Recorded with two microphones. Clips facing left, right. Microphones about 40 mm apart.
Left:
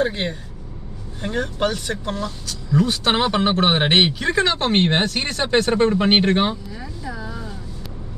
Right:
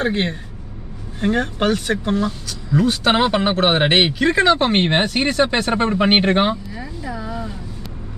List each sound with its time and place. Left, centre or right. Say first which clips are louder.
0.0 s speech: right 2 dB; right